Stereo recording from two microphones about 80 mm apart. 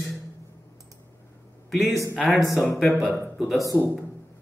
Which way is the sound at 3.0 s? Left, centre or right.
Centre.